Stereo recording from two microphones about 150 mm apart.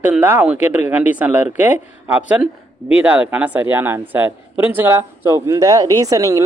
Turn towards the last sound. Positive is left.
turn(degrees=-20)  # may be behind; listen again after turning